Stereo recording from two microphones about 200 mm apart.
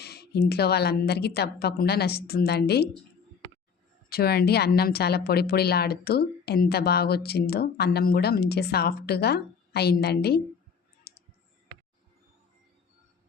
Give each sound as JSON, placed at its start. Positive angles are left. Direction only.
{"t": 0.0, "sound": "speech", "side_deg": 55}
{"t": 4.1, "sound": "speech", "side_deg": 50}
{"t": 11.1, "sound": "clicking", "side_deg": 50}